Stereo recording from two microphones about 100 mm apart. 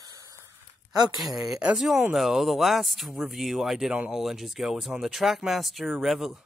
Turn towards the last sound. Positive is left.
turn(degrees=0)  # may be behind; listen again after turning